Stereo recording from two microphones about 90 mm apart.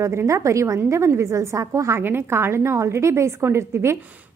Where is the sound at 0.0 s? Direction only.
30° right (ahead or behind).